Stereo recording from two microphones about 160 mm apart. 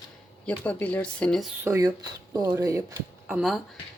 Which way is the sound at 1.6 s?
20° right (ahead or behind).